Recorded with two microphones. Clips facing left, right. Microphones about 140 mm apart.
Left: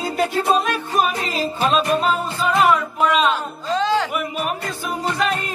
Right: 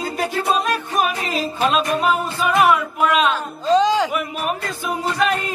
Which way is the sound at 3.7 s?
15° right (ahead or behind).